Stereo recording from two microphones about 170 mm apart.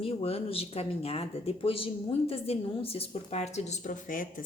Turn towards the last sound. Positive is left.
turn(degrees=50)  # may be behind; listen again after turning